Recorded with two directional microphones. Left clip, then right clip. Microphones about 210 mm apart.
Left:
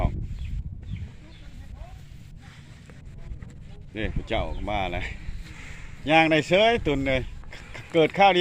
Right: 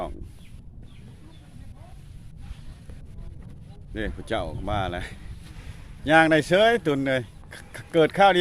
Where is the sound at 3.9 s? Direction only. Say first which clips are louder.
Even; 45° right (ahead or behind).